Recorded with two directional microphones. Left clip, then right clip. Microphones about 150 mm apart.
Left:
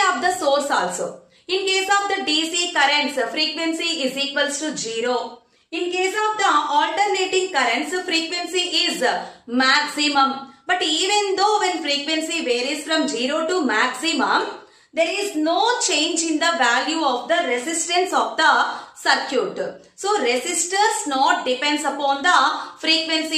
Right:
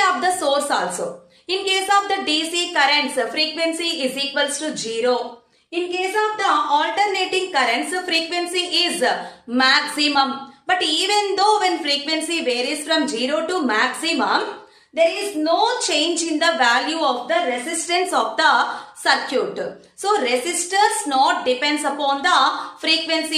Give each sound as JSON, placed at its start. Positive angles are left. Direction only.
{"t": 0.4, "sound": "a sound", "side_deg": -25}
{"t": 1.7, "sound": "a woman's voice", "side_deg": -25}
{"t": 15.4, "sound": "a woman's voice", "side_deg": -25}